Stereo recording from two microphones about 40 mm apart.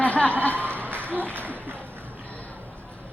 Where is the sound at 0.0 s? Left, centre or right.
Left.